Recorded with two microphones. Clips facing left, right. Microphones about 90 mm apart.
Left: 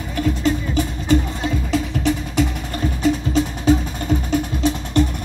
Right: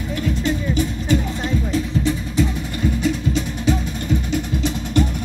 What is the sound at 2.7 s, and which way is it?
Music, 40° left (ahead or behind).